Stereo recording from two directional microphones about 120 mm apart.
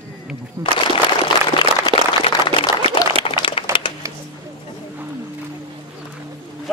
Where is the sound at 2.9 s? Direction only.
40° left (ahead or behind).